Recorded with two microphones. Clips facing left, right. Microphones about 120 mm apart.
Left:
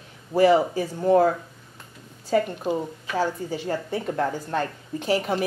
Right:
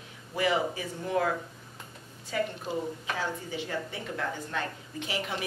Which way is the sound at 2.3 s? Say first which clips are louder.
Left 8 dB; 45° left (ahead or behind).